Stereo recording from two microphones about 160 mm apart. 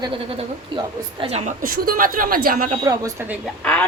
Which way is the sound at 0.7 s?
35° right (ahead or behind).